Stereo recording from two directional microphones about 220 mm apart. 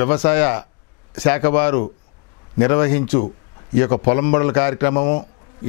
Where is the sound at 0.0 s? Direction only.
10° left (ahead or behind).